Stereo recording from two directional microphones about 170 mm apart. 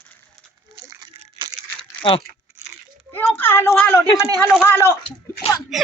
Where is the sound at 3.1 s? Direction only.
10° left (ahead or behind).